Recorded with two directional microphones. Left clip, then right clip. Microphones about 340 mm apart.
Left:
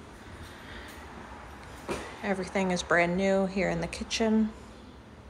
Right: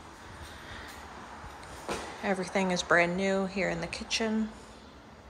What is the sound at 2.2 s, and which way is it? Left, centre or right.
Speech, centre.